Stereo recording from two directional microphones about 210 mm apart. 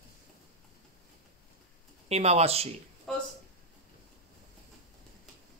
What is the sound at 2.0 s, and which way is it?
Speech, 30° right (ahead or behind).